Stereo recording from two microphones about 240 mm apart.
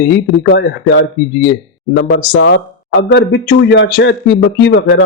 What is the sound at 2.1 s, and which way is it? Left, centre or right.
A man's voice, left.